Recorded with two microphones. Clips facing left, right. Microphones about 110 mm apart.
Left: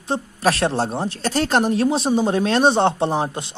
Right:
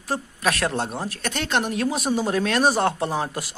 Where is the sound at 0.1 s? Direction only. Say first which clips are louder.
Left 4 dB; 30° left (ahead or behind).